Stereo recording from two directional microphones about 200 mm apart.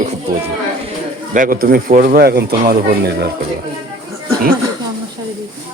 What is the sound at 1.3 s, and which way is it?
Speech, 45° right (ahead or behind).